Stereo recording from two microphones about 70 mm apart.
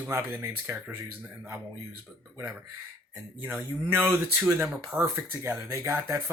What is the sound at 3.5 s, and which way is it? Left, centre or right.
Speech, right.